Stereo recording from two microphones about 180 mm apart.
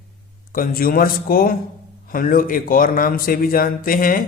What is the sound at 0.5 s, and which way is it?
A man's voice, 50° left (ahead or behind).